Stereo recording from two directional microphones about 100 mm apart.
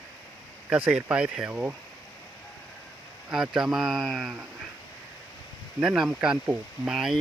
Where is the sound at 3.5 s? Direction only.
5° right (ahead or behind).